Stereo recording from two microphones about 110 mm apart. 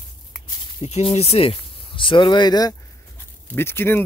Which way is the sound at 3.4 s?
20° left (ahead or behind).